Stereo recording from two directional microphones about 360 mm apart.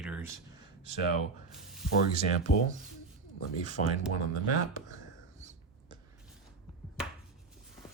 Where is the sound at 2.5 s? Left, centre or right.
Left.